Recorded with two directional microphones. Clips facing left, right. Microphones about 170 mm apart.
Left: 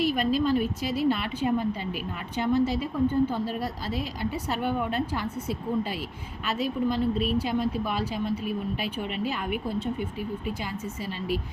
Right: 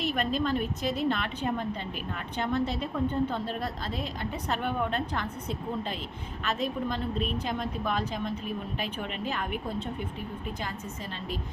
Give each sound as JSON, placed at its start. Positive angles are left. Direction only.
{"t": 0.0, "sound": "a woman's voice", "side_deg": 5}